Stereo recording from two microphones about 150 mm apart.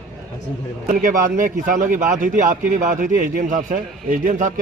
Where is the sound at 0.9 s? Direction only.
65° right (ahead or behind).